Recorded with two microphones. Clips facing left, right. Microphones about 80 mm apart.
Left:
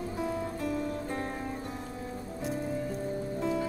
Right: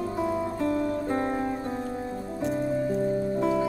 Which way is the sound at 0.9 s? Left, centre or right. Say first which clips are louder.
Right 7 dB; right.